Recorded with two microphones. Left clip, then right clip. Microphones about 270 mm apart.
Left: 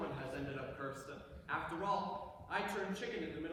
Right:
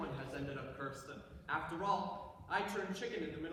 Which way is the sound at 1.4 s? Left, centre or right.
Centre.